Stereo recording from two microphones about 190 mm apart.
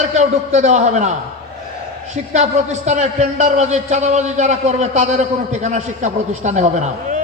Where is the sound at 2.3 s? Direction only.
40° right (ahead or behind).